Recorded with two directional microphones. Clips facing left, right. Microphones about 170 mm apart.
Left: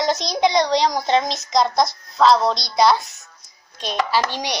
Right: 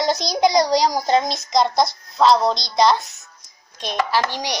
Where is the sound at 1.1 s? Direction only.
Centre (ahead or behind).